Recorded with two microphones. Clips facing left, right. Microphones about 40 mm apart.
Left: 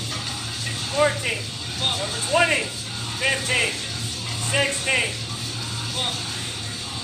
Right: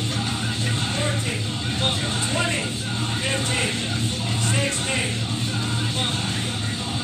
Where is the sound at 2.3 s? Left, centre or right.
Left.